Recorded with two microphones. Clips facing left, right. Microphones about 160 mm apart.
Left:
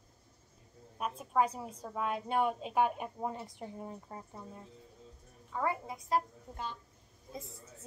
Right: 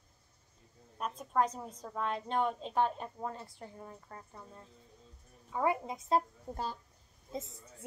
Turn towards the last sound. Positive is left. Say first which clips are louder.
# right 4 dB
turn(degrees=-20)  # may be behind; listen again after turning